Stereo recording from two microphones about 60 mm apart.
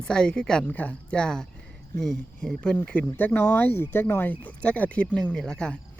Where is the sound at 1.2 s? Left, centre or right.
Centre.